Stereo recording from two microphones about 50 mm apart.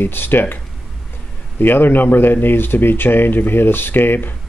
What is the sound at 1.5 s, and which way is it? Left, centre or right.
Speech, left.